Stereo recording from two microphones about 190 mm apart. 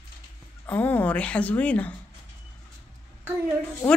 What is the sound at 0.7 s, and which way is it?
A woman's voice, 10° left (ahead or behind).